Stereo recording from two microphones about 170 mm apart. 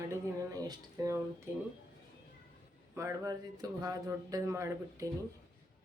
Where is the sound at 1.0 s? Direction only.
20° right (ahead or behind).